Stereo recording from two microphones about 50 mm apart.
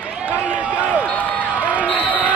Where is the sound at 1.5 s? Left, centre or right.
Right.